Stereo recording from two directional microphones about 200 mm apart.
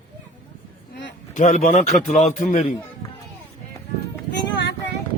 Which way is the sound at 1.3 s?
40° left (ahead or behind).